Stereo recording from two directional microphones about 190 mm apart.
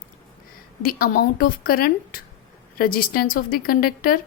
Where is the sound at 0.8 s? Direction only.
50° left (ahead or behind).